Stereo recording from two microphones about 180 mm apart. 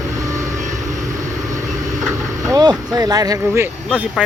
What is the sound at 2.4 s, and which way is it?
Vehicle, 20° right (ahead or behind).